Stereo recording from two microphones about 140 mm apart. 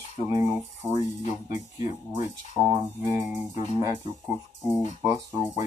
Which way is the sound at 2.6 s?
25° right (ahead or behind).